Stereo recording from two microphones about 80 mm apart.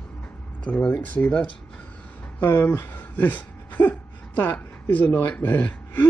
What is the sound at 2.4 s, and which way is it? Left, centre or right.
Speech, left.